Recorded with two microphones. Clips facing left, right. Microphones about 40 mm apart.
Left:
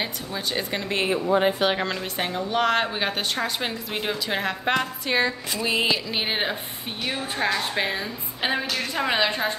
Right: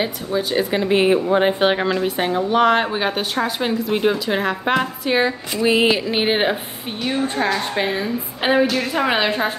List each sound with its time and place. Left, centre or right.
0.0 s a woman's voice: centre; by 1.8 s right
1.8 s a woman's voice: centre
5.9 s music: right
7.5 s a woman's voice: centre